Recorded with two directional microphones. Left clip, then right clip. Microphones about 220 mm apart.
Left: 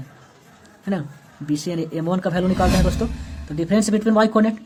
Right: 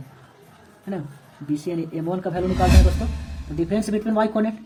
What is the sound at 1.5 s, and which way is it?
Speech, 30° left (ahead or behind).